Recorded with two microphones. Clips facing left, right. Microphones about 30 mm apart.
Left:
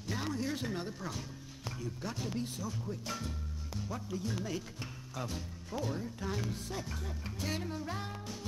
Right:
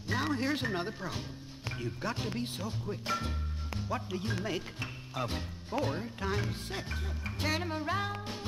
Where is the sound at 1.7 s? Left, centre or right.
Right.